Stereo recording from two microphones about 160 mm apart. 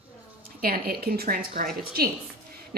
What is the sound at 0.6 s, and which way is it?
A woman's voice, 65° right (ahead or behind).